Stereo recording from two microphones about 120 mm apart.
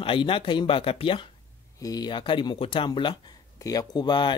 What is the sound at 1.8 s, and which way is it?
A man's voice, 30° left (ahead or behind).